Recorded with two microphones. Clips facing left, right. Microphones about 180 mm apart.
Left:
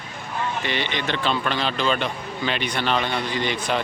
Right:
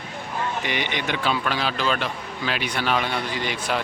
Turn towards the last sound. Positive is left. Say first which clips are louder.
# left 2 dB
turn(degrees=-5)  # may be behind; listen again after turning